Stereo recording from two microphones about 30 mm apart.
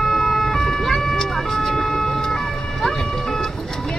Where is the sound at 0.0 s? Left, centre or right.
Centre.